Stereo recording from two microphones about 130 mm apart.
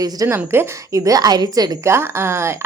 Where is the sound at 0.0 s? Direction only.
25° right (ahead or behind).